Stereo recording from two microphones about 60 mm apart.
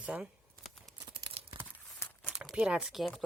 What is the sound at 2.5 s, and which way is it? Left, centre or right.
Speech, centre.